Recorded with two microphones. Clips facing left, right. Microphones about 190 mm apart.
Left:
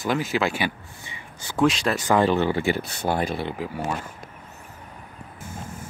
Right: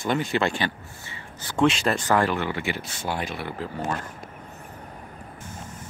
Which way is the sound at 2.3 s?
30° left (ahead or behind).